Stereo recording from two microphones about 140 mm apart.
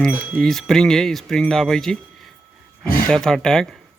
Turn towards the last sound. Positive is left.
turn(degrees=5)  # may be behind; listen again after turning